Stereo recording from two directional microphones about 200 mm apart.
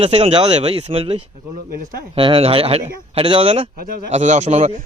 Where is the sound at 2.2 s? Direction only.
25° right (ahead or behind).